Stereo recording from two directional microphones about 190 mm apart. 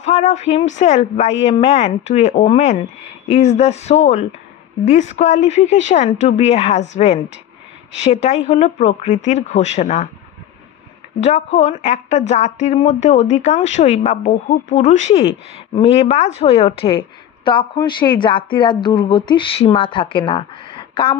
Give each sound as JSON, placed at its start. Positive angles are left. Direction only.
{"t": 0.0, "sound": "a woman's voice", "side_deg": 35}
{"t": 11.1, "sound": "a woman's voice", "side_deg": 40}